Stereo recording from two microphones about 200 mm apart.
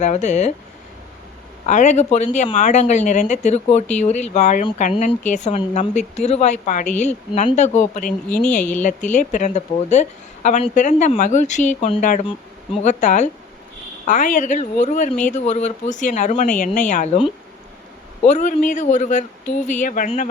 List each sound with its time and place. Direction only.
0.0 s a woman's voice: 35° left (ahead or behind)
1.6 s a woman's voice: 35° left (ahead or behind)
8.3 s speech: 5° left (ahead or behind)
9.0 s a woman's voice: 35° left (ahead or behind)